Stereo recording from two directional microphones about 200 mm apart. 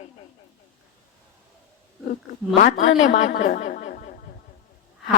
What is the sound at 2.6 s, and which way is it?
A woman's voice, 40° left (ahead or behind).